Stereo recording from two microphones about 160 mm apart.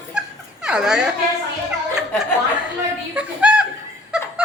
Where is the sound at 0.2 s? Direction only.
5° right (ahead or behind).